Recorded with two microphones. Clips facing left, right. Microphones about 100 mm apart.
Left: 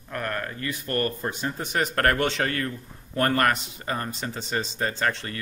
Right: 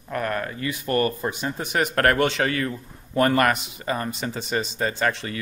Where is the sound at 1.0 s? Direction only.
80° right.